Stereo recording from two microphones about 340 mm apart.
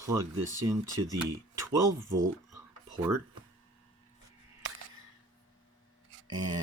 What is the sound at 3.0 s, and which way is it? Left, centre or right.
Speech, right.